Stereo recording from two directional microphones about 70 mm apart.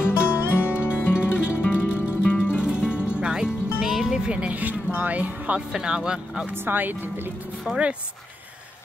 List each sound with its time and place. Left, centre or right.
0.1 s music: left
2.6 s music: centre
5.8 s speech: centre
6.5 s speech: right
7.7 s speech: centre